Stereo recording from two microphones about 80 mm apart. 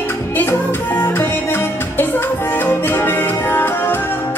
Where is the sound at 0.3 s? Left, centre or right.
Left.